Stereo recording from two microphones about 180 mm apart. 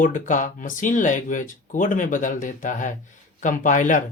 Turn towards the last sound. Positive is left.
turn(degrees=45)  # may be behind; listen again after turning